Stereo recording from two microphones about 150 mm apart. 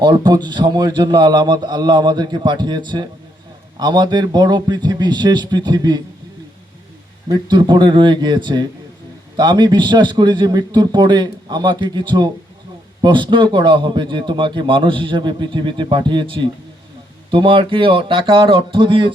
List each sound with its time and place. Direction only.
0.0 s a man's voice: 30° right (ahead or behind)
7.3 s a man's voice: 30° right (ahead or behind)